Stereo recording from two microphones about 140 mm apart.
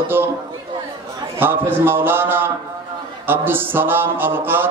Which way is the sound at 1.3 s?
15° right (ahead or behind).